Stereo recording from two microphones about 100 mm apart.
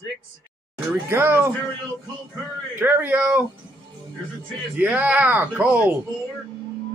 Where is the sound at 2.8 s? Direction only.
20° right (ahead or behind).